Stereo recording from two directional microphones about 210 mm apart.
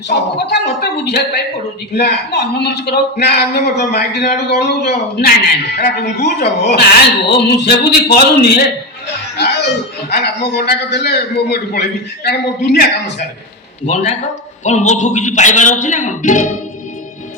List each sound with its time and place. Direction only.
0.1 s a man's voice: 55° left (ahead or behind)
9.4 s music: 55° left (ahead or behind)
10.1 s a man's voice: 50° left (ahead or behind)
13.8 s a man's voice: 35° left (ahead or behind)